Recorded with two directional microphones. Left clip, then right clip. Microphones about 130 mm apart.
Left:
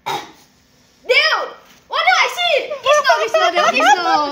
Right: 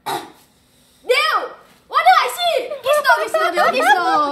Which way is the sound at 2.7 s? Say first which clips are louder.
Left 3 dB; 5° right (ahead or behind).